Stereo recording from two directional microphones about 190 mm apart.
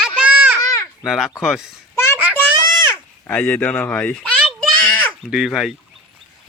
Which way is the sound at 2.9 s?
10° left (ahead or behind).